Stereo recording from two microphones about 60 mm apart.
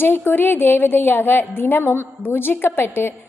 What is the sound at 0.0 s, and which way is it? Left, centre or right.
A woman's voice, left.